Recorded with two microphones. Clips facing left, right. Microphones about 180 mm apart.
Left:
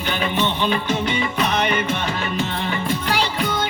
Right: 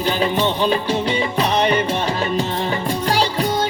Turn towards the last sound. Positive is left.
turn(degrees=-35)  # may be behind; listen again after turning